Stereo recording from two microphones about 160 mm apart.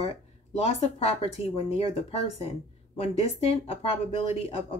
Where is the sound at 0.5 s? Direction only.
40° left (ahead or behind).